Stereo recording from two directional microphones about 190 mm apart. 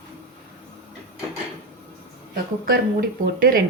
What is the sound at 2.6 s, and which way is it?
Speech, 50° right (ahead or behind).